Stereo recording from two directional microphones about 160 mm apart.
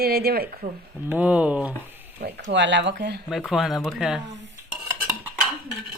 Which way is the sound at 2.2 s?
90° right.